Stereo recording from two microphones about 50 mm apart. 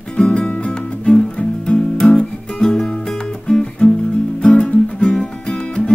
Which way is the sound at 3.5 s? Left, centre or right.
Centre.